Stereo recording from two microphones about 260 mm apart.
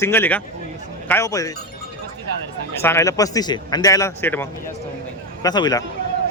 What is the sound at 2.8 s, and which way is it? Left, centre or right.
A man's voice, centre.